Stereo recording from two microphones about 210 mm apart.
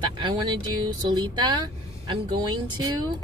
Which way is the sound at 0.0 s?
20° right (ahead or behind).